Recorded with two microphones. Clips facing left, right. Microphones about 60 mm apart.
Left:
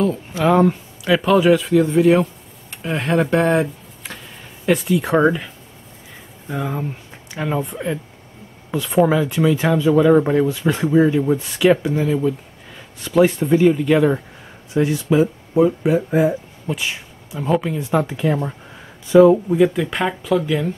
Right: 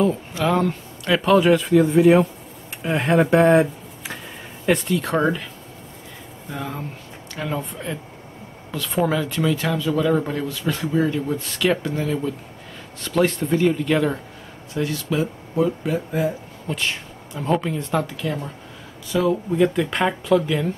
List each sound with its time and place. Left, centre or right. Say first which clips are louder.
0.4 s speech: left 6 dB; centre
6.5 s speech: left 6 dB; centre
16.6 s speech: even; centre
18.0 s speech: left 7 dB; left
19.5 s speech: left 3 dB; centre